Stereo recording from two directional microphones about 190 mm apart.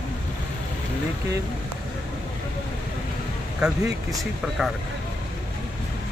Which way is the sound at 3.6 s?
5° right (ahead or behind).